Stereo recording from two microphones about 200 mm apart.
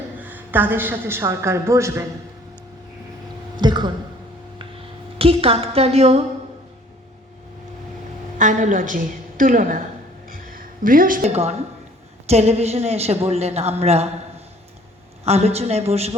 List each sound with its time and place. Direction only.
0.2 s a woman's voice: 10° right (ahead or behind)
3.6 s a sound: 20° right (ahead or behind)
5.1 s a man's voice: 30° right (ahead or behind)
8.4 s a man's voice: 40° right (ahead or behind)
10.2 s a sound: 45° right (ahead or behind)
12.3 s a man's voice: 30° right (ahead or behind)
15.2 s a man's voice: 30° right (ahead or behind)